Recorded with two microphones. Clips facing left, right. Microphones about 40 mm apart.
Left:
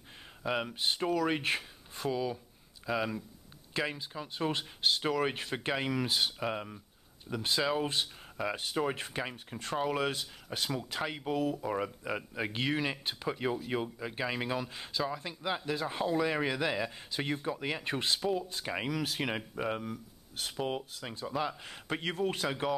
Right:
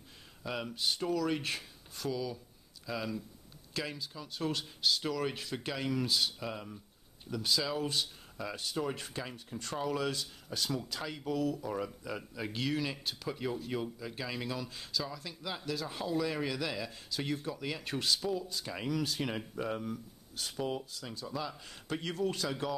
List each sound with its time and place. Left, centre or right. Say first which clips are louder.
0.4 s speech: left 4 dB; left